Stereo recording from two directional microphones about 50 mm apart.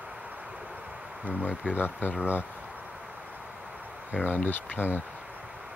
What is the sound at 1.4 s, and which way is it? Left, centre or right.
Speech, left.